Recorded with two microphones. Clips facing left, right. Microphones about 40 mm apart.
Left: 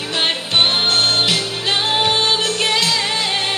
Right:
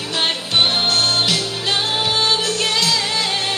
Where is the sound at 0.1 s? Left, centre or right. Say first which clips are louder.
Left 1 dB; centre.